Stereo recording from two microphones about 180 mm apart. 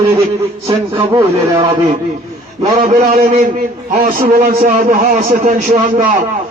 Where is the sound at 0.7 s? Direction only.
15° right (ahead or behind).